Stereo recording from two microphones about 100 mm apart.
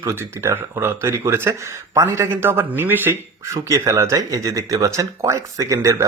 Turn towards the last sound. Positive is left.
turn(degrees=-30)  # may be behind; listen again after turning